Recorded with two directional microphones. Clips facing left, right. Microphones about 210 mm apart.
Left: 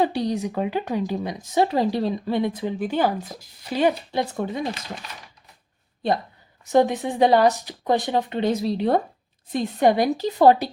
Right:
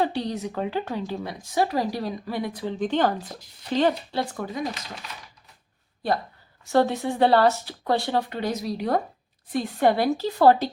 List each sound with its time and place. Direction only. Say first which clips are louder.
0.0 s speech: left 3 dB; 10° left (ahead or behind)
2.7 s speech: right 3 dB; 10° left (ahead or behind); by 4.7 s 25° left (ahead or behind)
6.7 s speech: left 2 dB; 15° left (ahead or behind)